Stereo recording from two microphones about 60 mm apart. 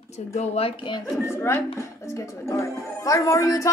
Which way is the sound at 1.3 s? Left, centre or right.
Left.